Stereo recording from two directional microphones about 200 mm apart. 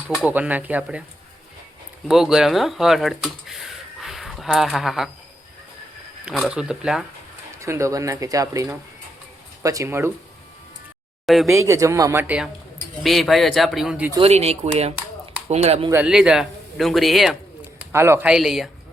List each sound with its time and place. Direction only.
0.1 s speech: 5° right (ahead or behind)
2.0 s speech: centre (ahead or behind)
6.2 s speech: 5° right (ahead or behind)
7.6 s speech: 15° right (ahead or behind)
11.3 s speech: centre (ahead or behind)
11.5 s speech: 15° right (ahead or behind)
13.0 s speech: centre (ahead or behind)
14.2 s speech: 30° right (ahead or behind)
15.9 s speech: 5° right (ahead or behind)
17.7 s speech: 10° right (ahead or behind)